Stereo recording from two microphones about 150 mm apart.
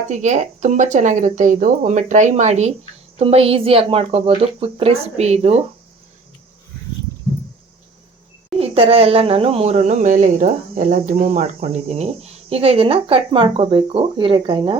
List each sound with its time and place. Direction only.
0.1 s speech: 55° right (ahead or behind)
8.5 s speech: 40° right (ahead or behind); by 11.3 s 65° right (ahead or behind)
11.3 s speech: 45° right (ahead or behind)